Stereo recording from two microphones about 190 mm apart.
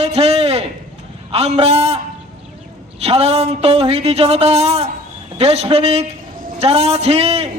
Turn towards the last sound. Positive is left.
turn(degrees=-35)  # may be behind; listen again after turning